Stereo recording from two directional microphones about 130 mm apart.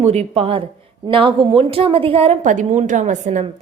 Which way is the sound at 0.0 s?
55° right (ahead or behind).